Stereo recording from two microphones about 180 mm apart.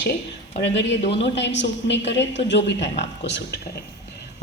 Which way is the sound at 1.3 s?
75° left (ahead or behind).